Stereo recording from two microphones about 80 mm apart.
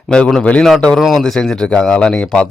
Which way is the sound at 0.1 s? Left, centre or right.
Centre.